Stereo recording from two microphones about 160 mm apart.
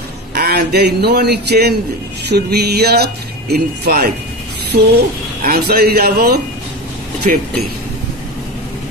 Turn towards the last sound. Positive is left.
turn(degrees=-55)  # may be behind; listen again after turning